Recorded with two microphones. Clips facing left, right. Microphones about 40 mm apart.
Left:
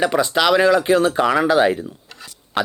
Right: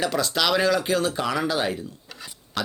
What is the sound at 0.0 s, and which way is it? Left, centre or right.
Speech, left.